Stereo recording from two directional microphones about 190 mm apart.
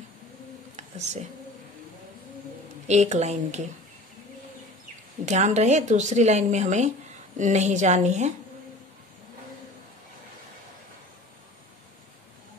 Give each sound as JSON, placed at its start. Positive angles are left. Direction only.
{"t": 0.7, "sound": "a sound", "side_deg": -35}
{"t": 2.9, "sound": "a woman's voice", "side_deg": -35}
{"t": 5.2, "sound": "a woman's voice", "side_deg": -40}